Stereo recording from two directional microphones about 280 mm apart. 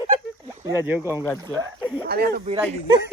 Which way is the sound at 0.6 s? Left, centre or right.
Centre.